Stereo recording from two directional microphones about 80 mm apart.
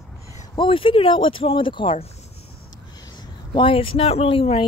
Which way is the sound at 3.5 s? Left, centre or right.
Left.